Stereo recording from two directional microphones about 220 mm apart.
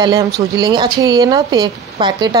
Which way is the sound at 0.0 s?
20° right (ahead or behind).